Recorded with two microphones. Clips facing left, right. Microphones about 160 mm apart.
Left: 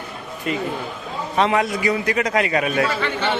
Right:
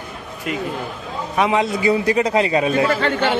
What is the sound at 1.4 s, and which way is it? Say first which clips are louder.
A man's voice: right 1 dB; 20° right (ahead or behind).